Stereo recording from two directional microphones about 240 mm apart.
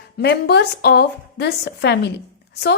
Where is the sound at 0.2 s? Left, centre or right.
Left.